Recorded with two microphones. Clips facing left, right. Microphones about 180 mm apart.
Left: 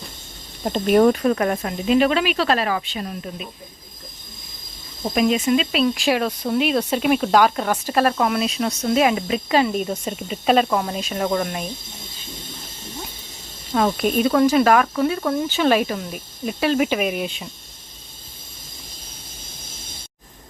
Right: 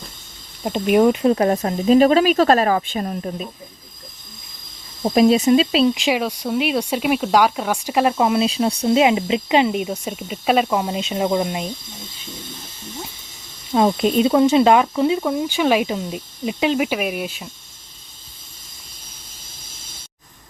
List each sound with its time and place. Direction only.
0.6 s speech: 10° right (ahead or behind)
1.2 s speech: 25° right (ahead or behind)
5.0 s speech: 35° right (ahead or behind)
5.9 s speech: 15° right (ahead or behind)
10.0 s speech: 5° right (ahead or behind)
13.7 s speech: 20° right (ahead or behind)
16.8 s speech: 5° right (ahead or behind)